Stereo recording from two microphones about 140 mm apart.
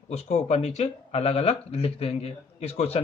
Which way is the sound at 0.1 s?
45° left (ahead or behind).